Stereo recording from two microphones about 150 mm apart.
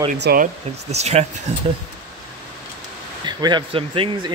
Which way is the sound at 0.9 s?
45° right (ahead or behind).